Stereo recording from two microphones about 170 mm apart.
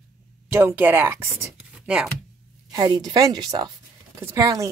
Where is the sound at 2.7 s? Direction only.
20° right (ahead or behind).